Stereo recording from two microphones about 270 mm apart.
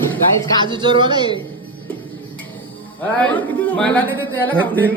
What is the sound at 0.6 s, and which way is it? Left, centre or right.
Speech, centre.